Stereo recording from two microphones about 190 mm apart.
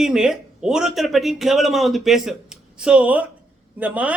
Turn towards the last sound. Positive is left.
turn(degrees=-5)  # may be behind; listen again after turning